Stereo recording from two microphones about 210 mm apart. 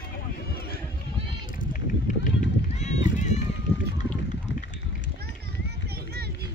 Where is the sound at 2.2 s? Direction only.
35° left (ahead or behind).